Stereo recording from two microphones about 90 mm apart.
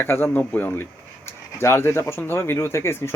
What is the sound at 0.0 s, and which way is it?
Speech, 25° left (ahead or behind).